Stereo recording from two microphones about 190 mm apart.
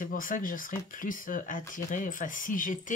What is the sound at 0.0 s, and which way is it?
Speech, 45° left (ahead or behind).